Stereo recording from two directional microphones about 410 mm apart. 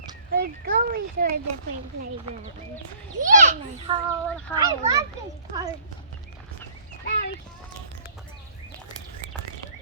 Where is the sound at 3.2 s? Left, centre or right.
Centre.